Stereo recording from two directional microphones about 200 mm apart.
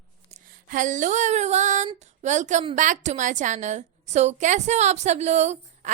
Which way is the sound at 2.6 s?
35° right (ahead or behind).